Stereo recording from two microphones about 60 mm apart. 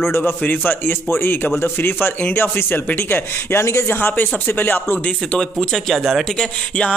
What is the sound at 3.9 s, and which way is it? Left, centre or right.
A man's voice, left.